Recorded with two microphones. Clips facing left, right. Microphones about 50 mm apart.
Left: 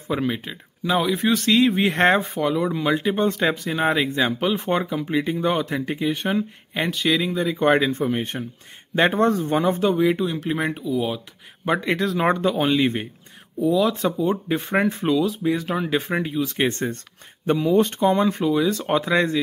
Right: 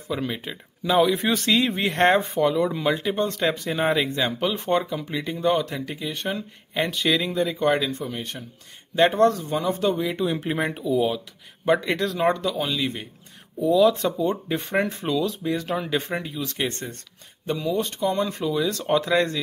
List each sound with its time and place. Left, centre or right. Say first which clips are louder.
0.2 s speech: left 4 dB; centre
5.8 s speech: left 6 dB; left; by 7.6 s centre
7.6 s speech: left 7 dB; left
9.0 s speech: right 1 dB; centre
9.3 s speech: left 5 dB; left
9.8 s speech: left 4 dB; centre
10.2 s speech: left 1 dB; centre
12.3 s speech: left 4 dB; left
13.6 s speech: right 1 dB; centre
16.5 s speech: left 6 dB; left
18.1 s speech: left 5 dB; left
18.4 s speech: left 4 dB; centre